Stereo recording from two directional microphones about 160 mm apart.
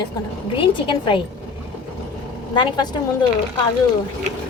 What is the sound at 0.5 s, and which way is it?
Speech, 30° left (ahead or behind).